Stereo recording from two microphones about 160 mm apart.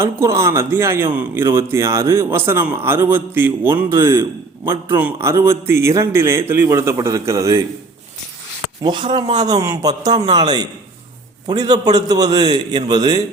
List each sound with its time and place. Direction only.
0.0 s speech: 15° right (ahead or behind)
8.8 s a man's voice: 30° right (ahead or behind)